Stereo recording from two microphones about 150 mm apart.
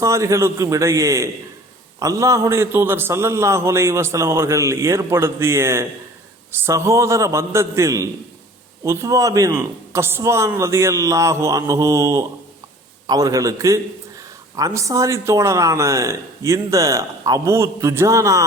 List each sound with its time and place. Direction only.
0.0 s a man's voice: 20° right (ahead or behind)